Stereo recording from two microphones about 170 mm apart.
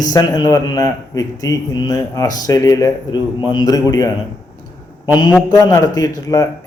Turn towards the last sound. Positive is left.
turn(degrees=20)  # may be behind; listen again after turning